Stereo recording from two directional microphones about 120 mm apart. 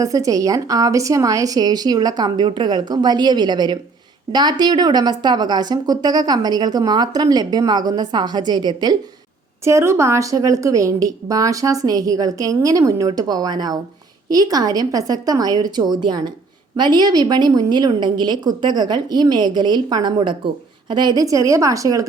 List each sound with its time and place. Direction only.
0.0 s a woman's voice: 30° right (ahead or behind)
9.6 s a woman's voice: 20° right (ahead or behind)